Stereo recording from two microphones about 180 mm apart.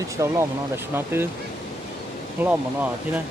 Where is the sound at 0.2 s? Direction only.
15° right (ahead or behind).